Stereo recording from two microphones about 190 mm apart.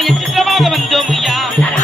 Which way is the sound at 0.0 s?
Centre (ahead or behind).